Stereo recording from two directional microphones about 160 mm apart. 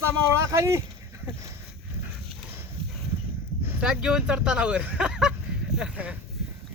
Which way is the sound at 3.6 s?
5° right (ahead or behind).